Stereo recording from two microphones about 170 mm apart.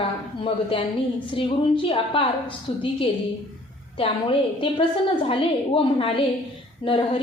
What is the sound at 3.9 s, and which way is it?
A woman's voice, 30° left (ahead or behind).